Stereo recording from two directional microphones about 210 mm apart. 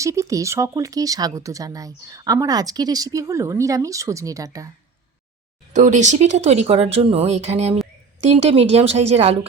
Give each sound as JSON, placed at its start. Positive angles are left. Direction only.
{"t": 0.0, "sound": "speech", "side_deg": -15}
{"t": 5.7, "sound": "speech", "side_deg": -35}